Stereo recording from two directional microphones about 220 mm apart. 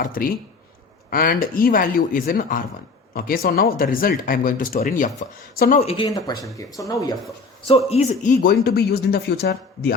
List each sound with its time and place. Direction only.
0.0 s speech: 40° left (ahead or behind)
5.8 s speech: 25° left (ahead or behind)
7.9 s speech: 30° left (ahead or behind); by 9.9 s 45° left (ahead or behind)